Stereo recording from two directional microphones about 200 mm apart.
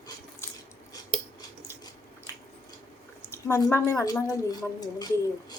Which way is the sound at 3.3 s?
15° left (ahead or behind).